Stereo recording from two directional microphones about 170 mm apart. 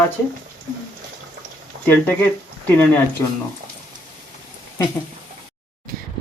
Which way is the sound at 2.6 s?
10° left (ahead or behind).